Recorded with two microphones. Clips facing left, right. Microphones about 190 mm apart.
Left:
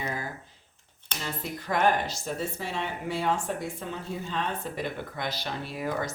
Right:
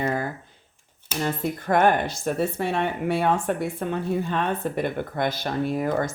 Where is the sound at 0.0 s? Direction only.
55° right (ahead or behind).